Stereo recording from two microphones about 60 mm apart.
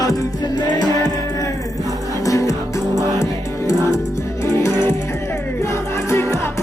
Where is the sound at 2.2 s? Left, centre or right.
Left.